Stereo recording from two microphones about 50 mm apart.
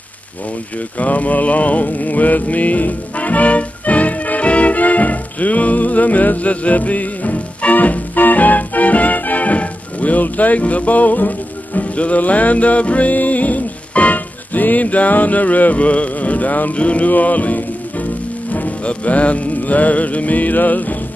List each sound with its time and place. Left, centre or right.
0.9 s mantra: left
18.5 s music: left